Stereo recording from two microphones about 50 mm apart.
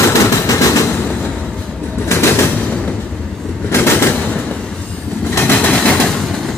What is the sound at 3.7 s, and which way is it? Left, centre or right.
Train, left.